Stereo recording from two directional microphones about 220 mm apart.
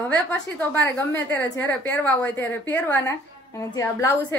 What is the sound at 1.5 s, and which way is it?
A woman's voice, 10° left (ahead or behind).